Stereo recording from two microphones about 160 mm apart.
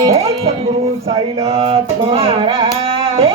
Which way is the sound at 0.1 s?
40° right (ahead or behind).